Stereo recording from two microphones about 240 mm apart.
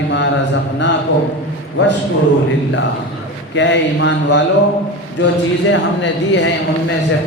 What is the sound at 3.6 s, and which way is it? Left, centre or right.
Speech, left.